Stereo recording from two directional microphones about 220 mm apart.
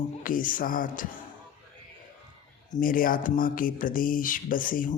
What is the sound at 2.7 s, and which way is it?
A woman's voice, 40° left (ahead or behind).